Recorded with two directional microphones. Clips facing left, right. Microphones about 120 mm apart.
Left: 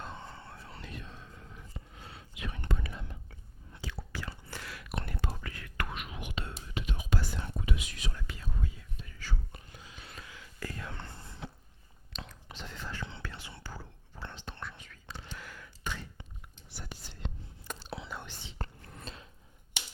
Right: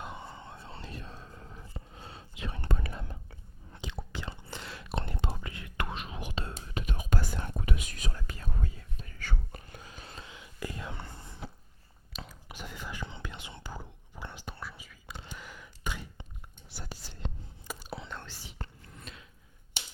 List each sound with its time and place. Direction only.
0.0 s whispering: 15° right (ahead or behind); by 2.6 s 30° right (ahead or behind)
2.6 s whispering: 45° right (ahead or behind)
3.8 s whispering: 20° right (ahead or behind)
6.8 s whispering: 45° right (ahead or behind); by 15.1 s 5° right (ahead or behind)
15.3 s gasp: 15° right (ahead or behind)
16.9 s whispering: 35° right (ahead or behind)
17.7 s whispering: 5° right (ahead or behind)
18.2 s whispering: 20° left (ahead or behind)
18.6 s whispering: 35° left (ahead or behind)